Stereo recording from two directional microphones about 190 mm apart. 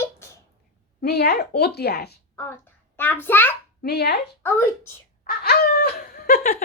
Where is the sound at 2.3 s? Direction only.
10° left (ahead or behind).